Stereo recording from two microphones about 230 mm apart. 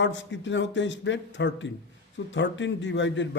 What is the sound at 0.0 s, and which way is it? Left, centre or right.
A man's voice, left.